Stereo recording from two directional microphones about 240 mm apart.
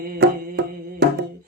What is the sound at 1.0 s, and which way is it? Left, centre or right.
Mantra, right.